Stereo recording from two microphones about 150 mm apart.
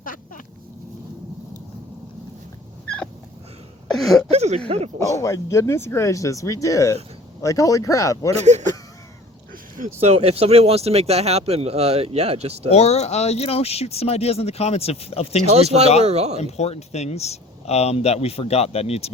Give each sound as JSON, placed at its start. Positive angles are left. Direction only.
{"t": 3.8, "sound": "throat clearing", "side_deg": 0}
{"t": 4.3, "sound": "speech", "side_deg": -45}
{"t": 4.9, "sound": "speech", "side_deg": 20}
{"t": 8.4, "sound": "speech", "side_deg": -50}
{"t": 10.0, "sound": "speech", "side_deg": -45}
{"t": 12.7, "sound": "speech", "side_deg": 45}
{"t": 15.4, "sound": "speech", "side_deg": -45}
{"t": 16.4, "sound": "speech", "side_deg": 45}